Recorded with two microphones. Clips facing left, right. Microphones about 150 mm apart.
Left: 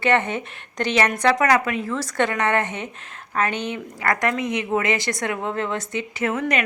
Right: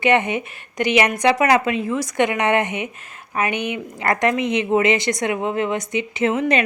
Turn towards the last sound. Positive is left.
turn(degrees=-20)  # may be behind; listen again after turning